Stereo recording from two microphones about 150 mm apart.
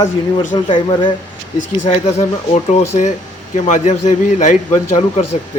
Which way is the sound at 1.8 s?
50° left (ahead or behind).